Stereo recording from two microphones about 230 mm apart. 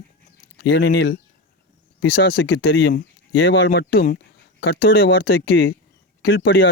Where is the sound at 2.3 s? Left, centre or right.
Left.